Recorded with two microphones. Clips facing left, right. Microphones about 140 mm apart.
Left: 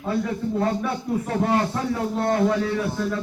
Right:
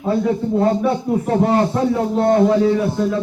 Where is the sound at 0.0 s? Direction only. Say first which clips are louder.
Right 7 dB; 25° right (ahead or behind).